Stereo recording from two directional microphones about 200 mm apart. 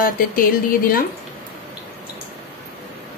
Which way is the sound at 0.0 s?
45° left (ahead or behind).